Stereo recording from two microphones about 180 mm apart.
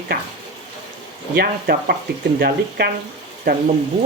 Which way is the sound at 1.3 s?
60° right (ahead or behind).